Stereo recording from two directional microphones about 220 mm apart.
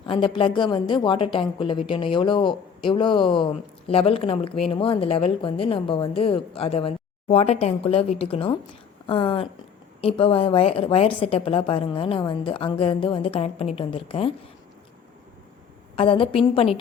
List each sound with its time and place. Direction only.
0.0 s a woman's voice: 25° left (ahead or behind)
16.0 s a woman's voice: 25° left (ahead or behind)